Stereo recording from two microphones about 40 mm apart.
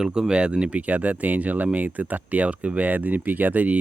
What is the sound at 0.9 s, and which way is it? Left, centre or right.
Speech, right.